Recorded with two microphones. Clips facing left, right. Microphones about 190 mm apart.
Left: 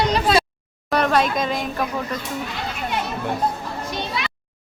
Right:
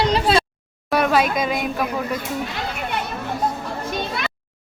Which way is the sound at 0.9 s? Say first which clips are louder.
Right 1 dB; 5° right (ahead or behind).